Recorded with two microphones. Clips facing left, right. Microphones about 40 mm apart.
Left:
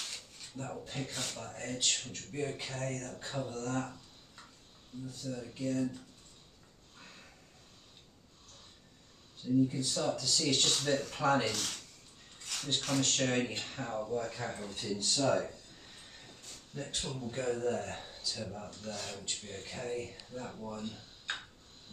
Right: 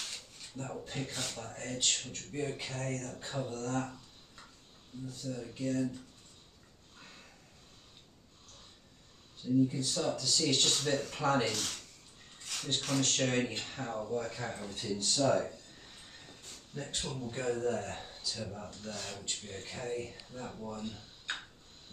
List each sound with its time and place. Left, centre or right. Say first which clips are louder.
0.1 s speech: even; centre
5.0 s speech: right 1 dB; centre
9.6 s speech: even; centre